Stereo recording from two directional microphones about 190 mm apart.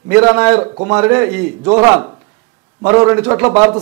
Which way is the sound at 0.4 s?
10° right (ahead or behind).